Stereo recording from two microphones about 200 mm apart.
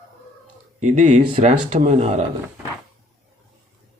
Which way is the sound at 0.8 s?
35° right (ahead or behind).